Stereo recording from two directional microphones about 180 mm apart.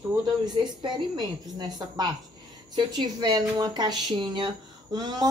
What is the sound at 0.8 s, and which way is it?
Speech, 25° right (ahead or behind).